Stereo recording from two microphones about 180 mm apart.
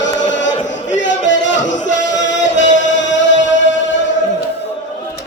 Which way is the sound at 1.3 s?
90° left.